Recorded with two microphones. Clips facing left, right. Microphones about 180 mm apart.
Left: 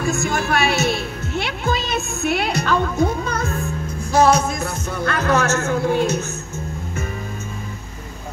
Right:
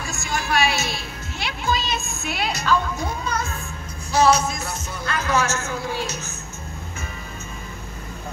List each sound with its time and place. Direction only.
0.0 s a woman's voice: 55° left (ahead or behind)